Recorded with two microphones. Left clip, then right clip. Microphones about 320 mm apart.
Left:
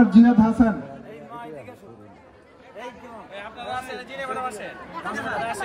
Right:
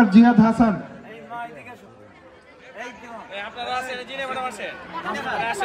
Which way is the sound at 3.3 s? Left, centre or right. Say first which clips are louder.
Right 4 dB; centre.